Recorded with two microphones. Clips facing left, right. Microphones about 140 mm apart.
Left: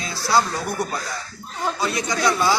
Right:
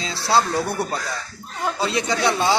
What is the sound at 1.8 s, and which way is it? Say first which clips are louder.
Speech: right 3 dB; 25° right (ahead or behind).